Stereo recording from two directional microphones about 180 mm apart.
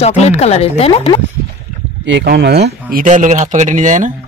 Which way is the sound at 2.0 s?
80° right.